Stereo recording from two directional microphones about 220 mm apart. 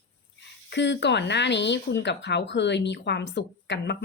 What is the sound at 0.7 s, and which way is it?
A woman's voice, 50° left (ahead or behind).